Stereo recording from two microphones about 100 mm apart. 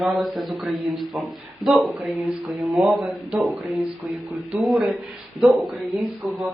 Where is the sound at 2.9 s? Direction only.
5° right (ahead or behind).